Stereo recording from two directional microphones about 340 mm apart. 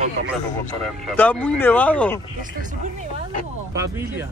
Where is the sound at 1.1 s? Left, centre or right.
Centre.